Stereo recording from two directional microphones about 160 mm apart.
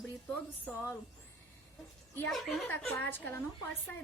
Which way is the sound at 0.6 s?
10° left (ahead or behind).